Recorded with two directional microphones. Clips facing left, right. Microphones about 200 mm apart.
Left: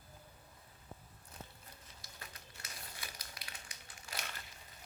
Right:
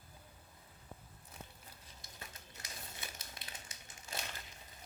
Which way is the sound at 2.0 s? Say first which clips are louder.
Right 2 dB; 20° right (ahead or behind).